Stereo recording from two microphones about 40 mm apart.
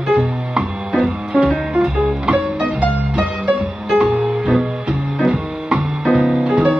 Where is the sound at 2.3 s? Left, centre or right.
Right.